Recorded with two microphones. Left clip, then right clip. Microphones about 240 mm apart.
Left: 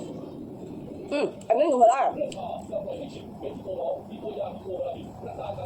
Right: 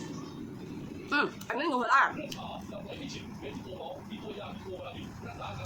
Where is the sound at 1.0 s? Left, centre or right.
Centre.